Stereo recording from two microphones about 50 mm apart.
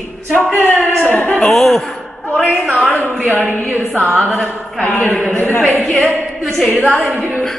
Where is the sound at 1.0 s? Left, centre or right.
Left.